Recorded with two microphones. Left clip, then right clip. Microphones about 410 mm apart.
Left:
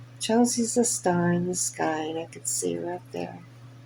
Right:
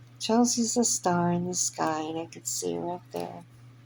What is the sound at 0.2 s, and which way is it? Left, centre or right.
Speech, right.